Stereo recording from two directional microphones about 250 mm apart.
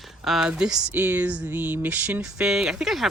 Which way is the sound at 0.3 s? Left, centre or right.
Centre.